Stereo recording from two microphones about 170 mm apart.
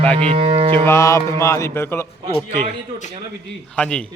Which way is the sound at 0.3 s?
30° right (ahead or behind).